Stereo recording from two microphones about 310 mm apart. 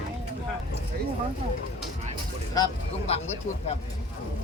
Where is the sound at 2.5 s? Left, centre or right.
Centre.